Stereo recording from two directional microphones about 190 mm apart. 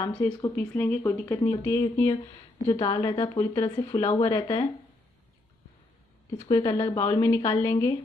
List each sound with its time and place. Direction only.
0.0 s a woman's voice: 20° left (ahead or behind)
6.5 s a woman's voice: 20° left (ahead or behind)